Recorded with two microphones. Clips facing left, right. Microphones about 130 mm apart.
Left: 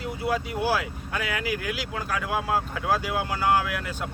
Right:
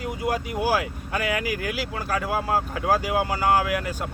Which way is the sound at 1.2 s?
50° right (ahead or behind).